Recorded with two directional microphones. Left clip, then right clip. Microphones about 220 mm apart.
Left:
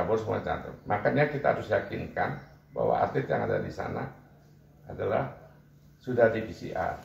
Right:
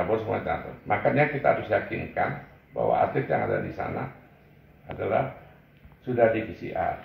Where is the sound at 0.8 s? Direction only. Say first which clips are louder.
Right 3 dB; 10° left (ahead or behind).